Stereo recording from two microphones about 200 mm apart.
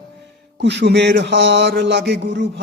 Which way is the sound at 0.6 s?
60° right (ahead or behind).